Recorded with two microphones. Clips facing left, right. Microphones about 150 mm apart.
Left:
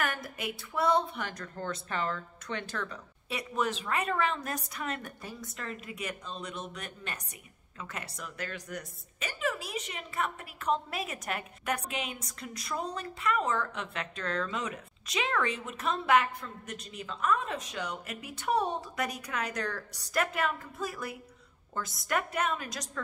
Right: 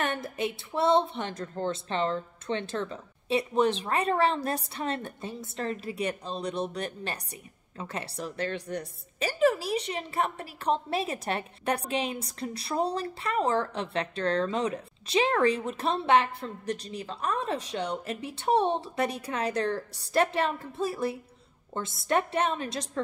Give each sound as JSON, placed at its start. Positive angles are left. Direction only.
{"t": 0.0, "sound": "a woman's voice", "side_deg": -25}